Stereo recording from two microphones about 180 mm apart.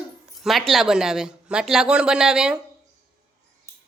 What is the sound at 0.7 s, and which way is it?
Speech, centre (ahead or behind).